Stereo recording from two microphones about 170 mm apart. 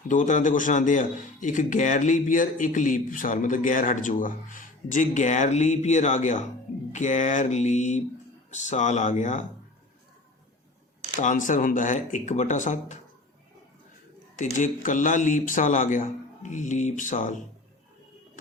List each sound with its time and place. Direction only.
0.1 s speech: 50° left (ahead or behind)
11.2 s speech: 50° left (ahead or behind)
14.3 s speech: 50° left (ahead or behind)